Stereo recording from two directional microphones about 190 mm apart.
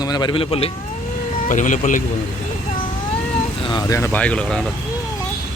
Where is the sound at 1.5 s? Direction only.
40° left (ahead or behind).